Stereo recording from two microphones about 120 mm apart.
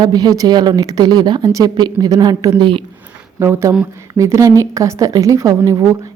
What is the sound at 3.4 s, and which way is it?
A woman's voice, 20° right (ahead or behind).